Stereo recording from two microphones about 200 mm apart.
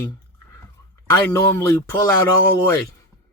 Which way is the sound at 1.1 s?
10° left (ahead or behind).